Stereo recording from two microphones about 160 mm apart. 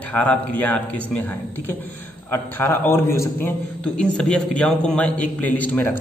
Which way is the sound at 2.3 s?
10° left (ahead or behind).